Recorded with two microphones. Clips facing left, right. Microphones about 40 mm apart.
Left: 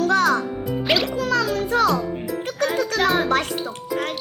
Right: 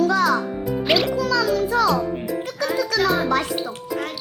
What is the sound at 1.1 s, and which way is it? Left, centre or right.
A child's voice, left.